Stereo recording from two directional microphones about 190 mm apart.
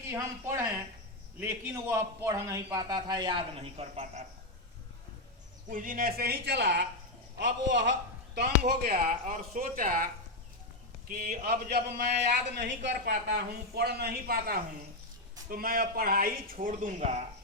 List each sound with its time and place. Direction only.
0.0 s a man's voice: 15° right (ahead or behind); by 4.2 s 35° right (ahead or behind)
5.6 s a man's voice: 45° right (ahead or behind); by 7.9 s 70° right (ahead or behind)
8.4 s speech: 55° right (ahead or behind)
11.1 s a man's voice: 45° right (ahead or behind)